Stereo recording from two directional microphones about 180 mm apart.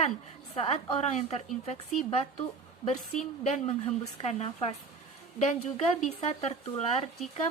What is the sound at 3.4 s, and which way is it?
A woman's voice, 40° left (ahead or behind).